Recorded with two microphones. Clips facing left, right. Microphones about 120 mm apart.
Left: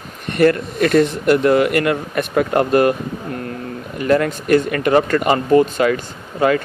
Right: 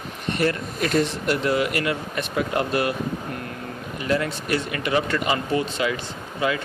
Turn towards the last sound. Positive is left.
turn(degrees=50)  # may be behind; listen again after turning